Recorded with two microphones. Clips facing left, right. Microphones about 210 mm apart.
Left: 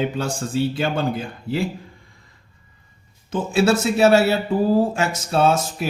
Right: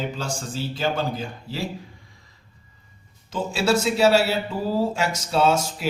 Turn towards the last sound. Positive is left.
turn(degrees=55)  # may be behind; listen again after turning